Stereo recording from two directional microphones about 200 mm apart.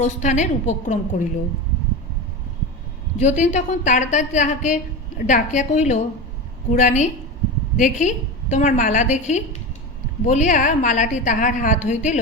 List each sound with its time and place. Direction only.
0.0 s a woman's voice: 35° left (ahead or behind)
3.2 s a woman's voice: 35° left (ahead or behind)